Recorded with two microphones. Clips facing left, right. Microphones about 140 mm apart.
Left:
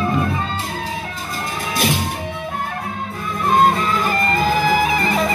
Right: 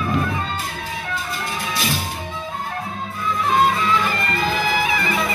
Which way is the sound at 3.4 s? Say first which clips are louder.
Left 3 dB; 45° left (ahead or behind).